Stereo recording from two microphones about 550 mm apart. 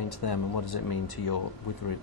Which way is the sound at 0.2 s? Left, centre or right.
Left.